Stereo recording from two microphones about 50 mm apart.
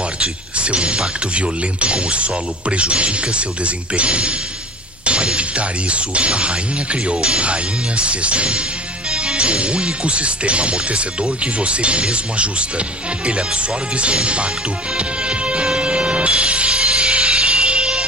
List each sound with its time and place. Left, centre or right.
0.2 s speech: right
15.0 s music: right